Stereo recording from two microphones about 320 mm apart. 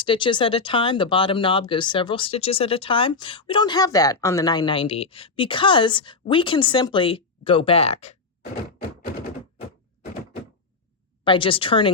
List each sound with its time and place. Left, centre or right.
0.0 s speech: centre
11.2 s speech: centre